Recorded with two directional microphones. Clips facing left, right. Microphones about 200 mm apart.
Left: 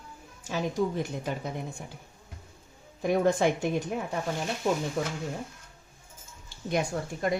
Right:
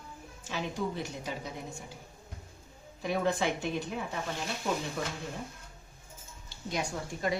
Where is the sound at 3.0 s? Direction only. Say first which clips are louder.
Left 6 dB; 50° left (ahead or behind).